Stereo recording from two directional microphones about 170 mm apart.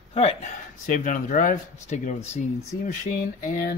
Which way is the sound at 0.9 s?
50° left (ahead or behind).